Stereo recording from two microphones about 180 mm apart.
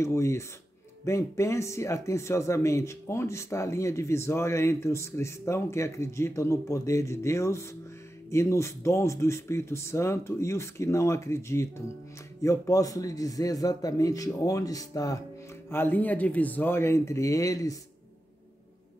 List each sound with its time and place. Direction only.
0.0 s a man's voice: 15° left (ahead or behind)